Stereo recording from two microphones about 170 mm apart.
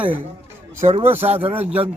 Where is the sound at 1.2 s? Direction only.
40° right (ahead or behind).